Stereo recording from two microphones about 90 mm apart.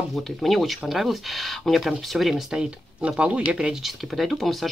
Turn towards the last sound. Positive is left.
turn(degrees=0)  # may be behind; listen again after turning